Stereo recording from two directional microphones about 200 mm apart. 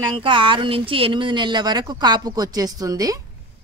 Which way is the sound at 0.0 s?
20° right (ahead or behind).